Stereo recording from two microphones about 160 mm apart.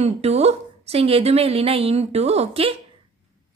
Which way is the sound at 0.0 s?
40° right (ahead or behind).